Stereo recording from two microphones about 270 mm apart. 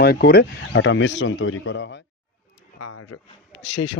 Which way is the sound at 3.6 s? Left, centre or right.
Left.